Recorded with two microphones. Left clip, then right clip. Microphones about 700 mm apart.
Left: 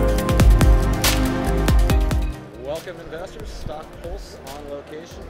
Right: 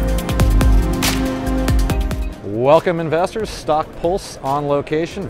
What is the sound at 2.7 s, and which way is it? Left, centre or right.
Speech, right.